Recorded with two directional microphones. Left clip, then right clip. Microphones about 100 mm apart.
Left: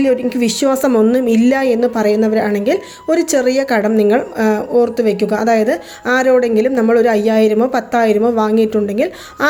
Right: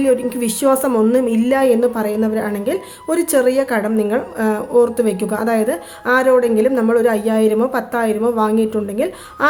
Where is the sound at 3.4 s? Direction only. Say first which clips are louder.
Left 2 dB; 35° left (ahead or behind).